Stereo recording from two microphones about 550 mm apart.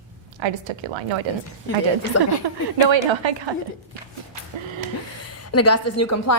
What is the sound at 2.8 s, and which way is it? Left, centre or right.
Speech, right.